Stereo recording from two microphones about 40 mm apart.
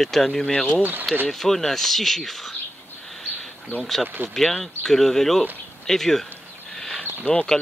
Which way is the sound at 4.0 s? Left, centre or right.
Right.